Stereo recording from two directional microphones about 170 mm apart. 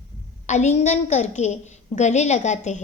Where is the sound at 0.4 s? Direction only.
45° left (ahead or behind).